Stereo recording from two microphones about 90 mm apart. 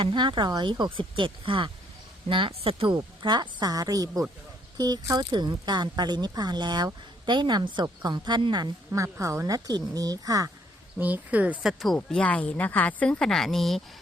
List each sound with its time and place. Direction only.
0.0 s a woman's voice: 65° right (ahead or behind)
2.3 s a woman's voice: 80° right; by 8.7 s 55° right (ahead or behind)
8.9 s speech: 35° right (ahead or behind)
10.9 s speech: 15° right (ahead or behind)
11.6 s speech: 5° right (ahead or behind)
11.9 s speech: 15° left (ahead or behind)